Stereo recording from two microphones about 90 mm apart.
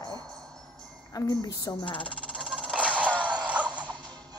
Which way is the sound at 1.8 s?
70° left (ahead or behind).